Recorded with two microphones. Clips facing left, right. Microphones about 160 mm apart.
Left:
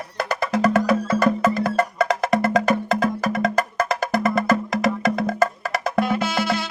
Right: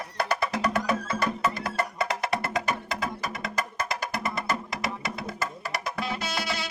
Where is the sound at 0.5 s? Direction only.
90° left.